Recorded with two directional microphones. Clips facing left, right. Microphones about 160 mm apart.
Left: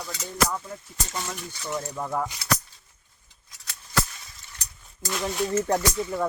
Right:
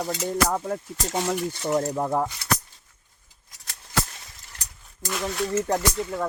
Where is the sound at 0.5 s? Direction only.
60° right (ahead or behind).